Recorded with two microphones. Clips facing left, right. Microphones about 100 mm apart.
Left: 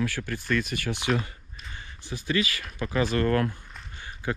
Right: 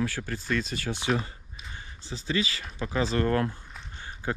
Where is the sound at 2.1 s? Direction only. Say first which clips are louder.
Left 2 dB; 55° left (ahead or behind).